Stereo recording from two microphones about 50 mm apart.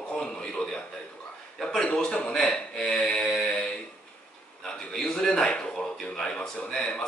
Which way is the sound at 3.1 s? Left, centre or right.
Centre.